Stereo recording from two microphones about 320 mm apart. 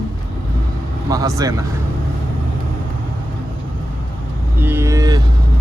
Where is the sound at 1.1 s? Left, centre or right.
Centre.